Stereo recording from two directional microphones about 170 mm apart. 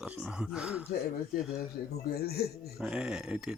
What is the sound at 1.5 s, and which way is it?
A man's voice, 65° left (ahead or behind).